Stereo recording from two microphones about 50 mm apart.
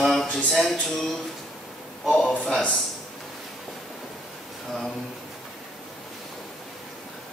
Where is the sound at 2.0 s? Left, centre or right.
Left.